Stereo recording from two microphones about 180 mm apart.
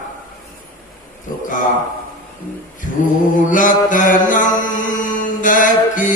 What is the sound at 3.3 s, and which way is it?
Mantra, 45° left (ahead or behind).